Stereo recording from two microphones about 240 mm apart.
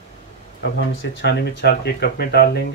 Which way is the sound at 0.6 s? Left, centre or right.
Left.